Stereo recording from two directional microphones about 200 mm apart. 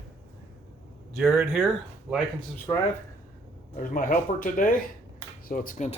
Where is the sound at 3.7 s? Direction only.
45° left (ahead or behind).